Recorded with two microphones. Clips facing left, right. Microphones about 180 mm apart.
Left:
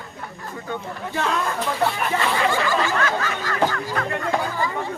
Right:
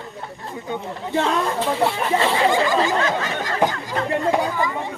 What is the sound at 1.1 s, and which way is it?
Speech, 25° right (ahead or behind).